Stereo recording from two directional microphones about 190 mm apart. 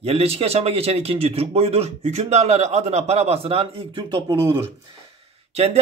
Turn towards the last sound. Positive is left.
turn(degrees=-35)  # may be behind; listen again after turning